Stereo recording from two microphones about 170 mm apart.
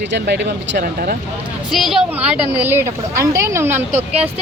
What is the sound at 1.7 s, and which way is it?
Speech, centre (ahead or behind).